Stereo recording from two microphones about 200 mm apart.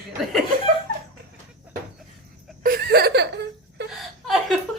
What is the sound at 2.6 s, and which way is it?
Chuckle, 50° right (ahead or behind).